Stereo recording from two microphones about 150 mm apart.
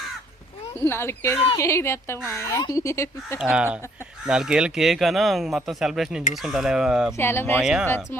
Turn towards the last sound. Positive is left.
turn(degrees=-5)  # may be behind; listen again after turning